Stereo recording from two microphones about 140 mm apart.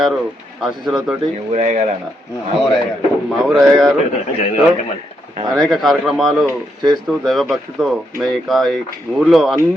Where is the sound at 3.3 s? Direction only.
Centre (ahead or behind).